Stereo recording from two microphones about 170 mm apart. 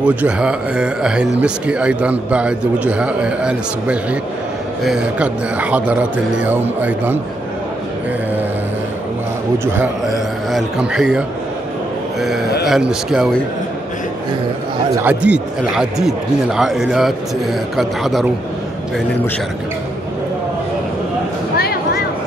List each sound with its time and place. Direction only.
0.0 s a man's voice: 10° right (ahead or behind)
10.0 s speech: 5° right (ahead or behind)
12.6 s speech: centre (ahead or behind)
15.0 s speech: 10° right (ahead or behind)
21.5 s a sound: 65° left (ahead or behind)